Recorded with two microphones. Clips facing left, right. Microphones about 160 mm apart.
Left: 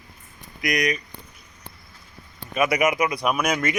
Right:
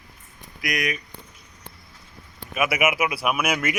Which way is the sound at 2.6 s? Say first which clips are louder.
Left 2 dB; 5° right (ahead or behind).